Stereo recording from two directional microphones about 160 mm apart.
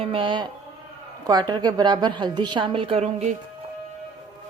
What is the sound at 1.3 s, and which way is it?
A woman's voice, 25° right (ahead or behind).